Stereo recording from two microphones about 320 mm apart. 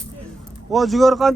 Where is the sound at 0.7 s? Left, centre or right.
Centre.